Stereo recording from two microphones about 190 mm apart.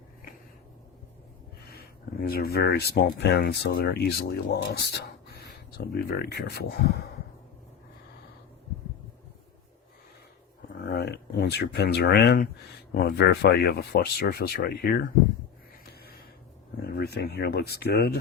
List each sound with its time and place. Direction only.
2.2 s speech: 50° left (ahead or behind)
10.8 s a sound: 55° left (ahead or behind)
12.9 s speech: 55° left (ahead or behind)
16.8 s speech: 55° left (ahead or behind)